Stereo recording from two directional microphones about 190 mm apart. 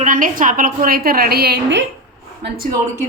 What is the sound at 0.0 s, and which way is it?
A woman's voice, 45° right (ahead or behind).